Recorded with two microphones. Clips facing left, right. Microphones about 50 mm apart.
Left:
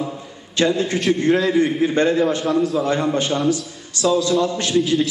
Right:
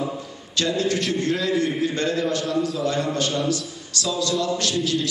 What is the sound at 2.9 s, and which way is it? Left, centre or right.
A man's voice, left.